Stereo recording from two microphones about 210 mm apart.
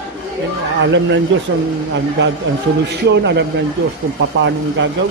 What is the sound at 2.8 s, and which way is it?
Speech, 55° right (ahead or behind).